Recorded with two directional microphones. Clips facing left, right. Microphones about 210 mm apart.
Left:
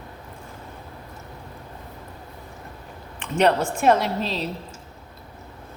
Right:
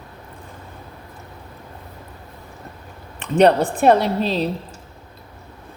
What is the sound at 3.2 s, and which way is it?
A woman's voice, 35° right (ahead or behind).